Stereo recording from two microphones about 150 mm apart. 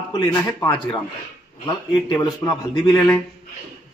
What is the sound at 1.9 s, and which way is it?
Speech, 30° left (ahead or behind).